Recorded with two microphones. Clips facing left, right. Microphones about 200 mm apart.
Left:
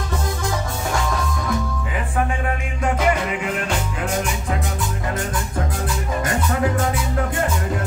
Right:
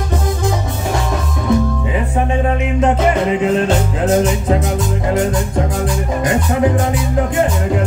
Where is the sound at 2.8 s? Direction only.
30° right (ahead or behind).